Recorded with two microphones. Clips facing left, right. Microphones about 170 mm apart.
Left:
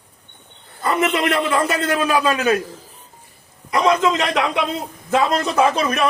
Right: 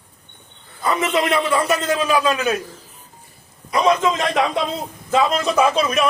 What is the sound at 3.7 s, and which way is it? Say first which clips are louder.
Speech: even; 75° left (ahead or behind).